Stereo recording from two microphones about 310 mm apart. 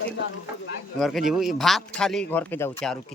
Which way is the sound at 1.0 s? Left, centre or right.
Centre.